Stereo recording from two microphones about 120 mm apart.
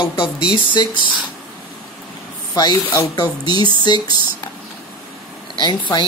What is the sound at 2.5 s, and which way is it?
A woman's voice, 35° left (ahead or behind).